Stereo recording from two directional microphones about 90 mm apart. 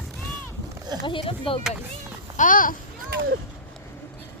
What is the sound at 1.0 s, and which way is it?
Speech, 75° left (ahead or behind).